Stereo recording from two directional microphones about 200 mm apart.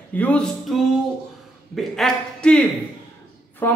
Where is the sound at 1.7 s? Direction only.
Centre (ahead or behind).